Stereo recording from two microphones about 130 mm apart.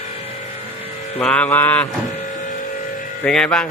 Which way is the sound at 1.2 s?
10° left (ahead or behind).